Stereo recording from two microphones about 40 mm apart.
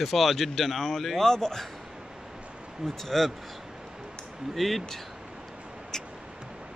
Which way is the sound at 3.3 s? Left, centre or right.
Centre.